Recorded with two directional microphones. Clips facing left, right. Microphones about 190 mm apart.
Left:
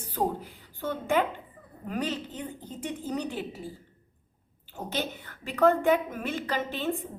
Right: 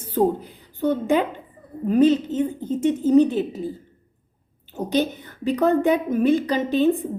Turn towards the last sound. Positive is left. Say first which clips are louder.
# right 11 dB
turn(degrees=-15)  # may be behind; listen again after turning